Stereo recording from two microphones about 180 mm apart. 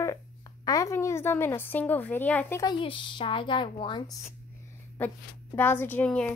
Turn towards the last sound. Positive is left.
turn(degrees=5)  # may be behind; listen again after turning